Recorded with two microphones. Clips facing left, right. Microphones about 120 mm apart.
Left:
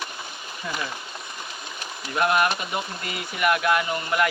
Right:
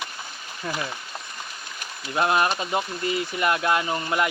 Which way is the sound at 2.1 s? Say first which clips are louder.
Even; 25° right (ahead or behind).